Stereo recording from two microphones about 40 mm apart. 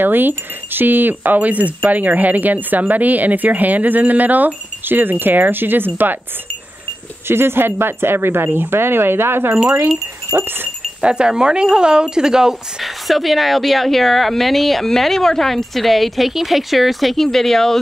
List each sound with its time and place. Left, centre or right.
0.0 s speech: right
7.2 s speech: right
10.3 s speech: right
11.0 s speech: right
12.8 s a woman's voice: centre